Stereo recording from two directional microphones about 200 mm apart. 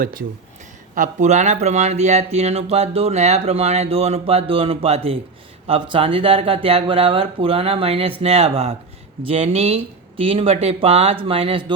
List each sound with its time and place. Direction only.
0.0 s speech: 45° right (ahead or behind); by 11.6 s 30° right (ahead or behind)